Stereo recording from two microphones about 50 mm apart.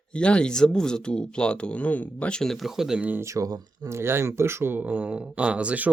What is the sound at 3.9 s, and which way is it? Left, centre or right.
Speech, right.